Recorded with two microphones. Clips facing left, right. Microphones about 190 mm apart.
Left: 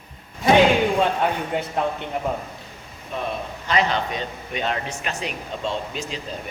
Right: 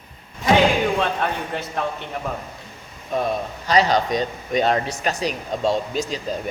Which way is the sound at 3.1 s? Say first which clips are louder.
Right 5 dB; 40° right (ahead or behind).